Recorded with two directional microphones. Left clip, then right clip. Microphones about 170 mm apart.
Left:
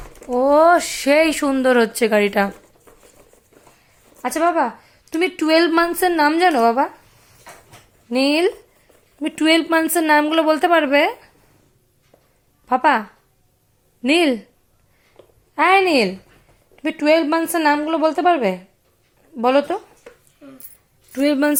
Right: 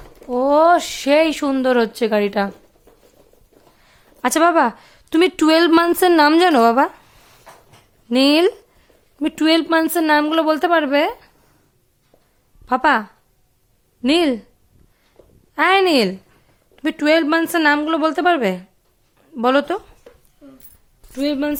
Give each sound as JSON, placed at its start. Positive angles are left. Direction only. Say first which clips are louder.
{"t": 0.2, "sound": "speech", "louder": "left 1 dB", "side_deg": -10}
{"t": 4.2, "sound": "speech", "louder": "right 4 dB", "side_deg": -45}
{"t": 8.1, "sound": "a woman's voice", "louder": "right 3 dB", "side_deg": -30}
{"t": 12.6, "sound": "a woman's voice", "louder": "even", "side_deg": -20}
{"t": 15.5, "sound": "a woman's voice", "louder": "even", "side_deg": -15}
{"t": 21.1, "sound": "speech", "louder": "left 3 dB", "side_deg": 0}